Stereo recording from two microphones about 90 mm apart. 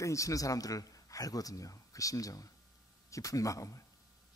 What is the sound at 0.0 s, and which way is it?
A man's voice, 35° left (ahead or behind).